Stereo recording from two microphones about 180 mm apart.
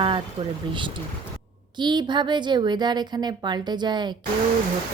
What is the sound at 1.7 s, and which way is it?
Speech, 25° right (ahead or behind).